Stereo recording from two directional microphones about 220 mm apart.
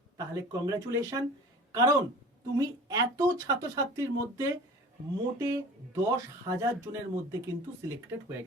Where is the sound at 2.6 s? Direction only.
15° right (ahead or behind).